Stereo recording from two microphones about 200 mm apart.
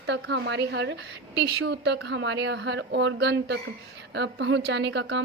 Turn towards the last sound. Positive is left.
turn(degrees=-60)  # may be behind; listen again after turning